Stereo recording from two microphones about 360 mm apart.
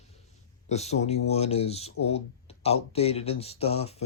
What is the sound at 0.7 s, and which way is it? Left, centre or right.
Speech, centre.